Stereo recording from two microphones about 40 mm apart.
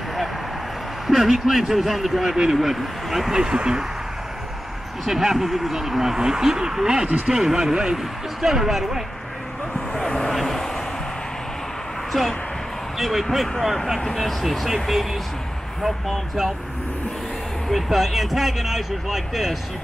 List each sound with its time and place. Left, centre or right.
1.0 s speech: centre
3.3 s speech: centre
5.0 s speech: centre
9.9 s vehicle: centre
12.1 s speech: centre
17.8 s speech: centre